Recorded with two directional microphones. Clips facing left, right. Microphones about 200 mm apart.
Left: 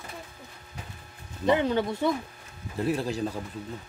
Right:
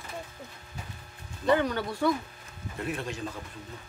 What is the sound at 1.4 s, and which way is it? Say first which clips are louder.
Speech: left 2 dB; 25° left (ahead or behind).